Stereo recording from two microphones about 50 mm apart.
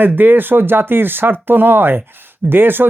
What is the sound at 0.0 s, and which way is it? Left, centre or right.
Speech, right.